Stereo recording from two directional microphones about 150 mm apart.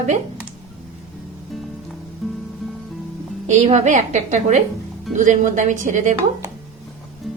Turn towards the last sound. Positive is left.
turn(degrees=-55)  # may be behind; listen again after turning